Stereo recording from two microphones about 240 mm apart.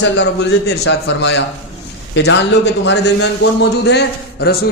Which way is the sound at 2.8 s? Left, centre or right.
Left.